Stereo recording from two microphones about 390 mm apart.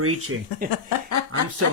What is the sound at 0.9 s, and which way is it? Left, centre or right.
Speech, left.